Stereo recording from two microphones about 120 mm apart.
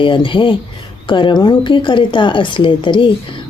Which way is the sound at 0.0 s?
45° left (ahead or behind).